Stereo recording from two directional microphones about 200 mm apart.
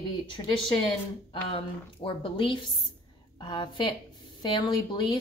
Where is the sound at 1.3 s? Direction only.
25° left (ahead or behind).